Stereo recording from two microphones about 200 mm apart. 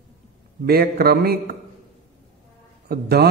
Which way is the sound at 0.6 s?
50° right (ahead or behind).